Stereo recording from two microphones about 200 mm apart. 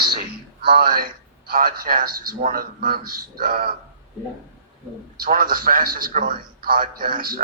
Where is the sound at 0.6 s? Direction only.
50° right (ahead or behind).